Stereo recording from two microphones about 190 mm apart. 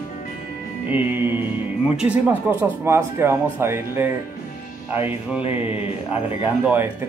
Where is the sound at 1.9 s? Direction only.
5° right (ahead or behind).